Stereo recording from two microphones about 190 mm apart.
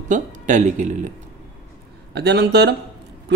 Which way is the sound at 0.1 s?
40° right (ahead or behind).